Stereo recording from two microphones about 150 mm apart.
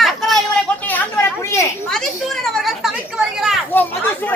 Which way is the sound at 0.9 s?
15° left (ahead or behind).